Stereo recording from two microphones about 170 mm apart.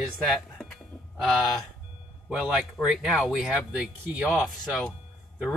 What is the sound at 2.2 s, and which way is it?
Speech, 5° right (ahead or behind).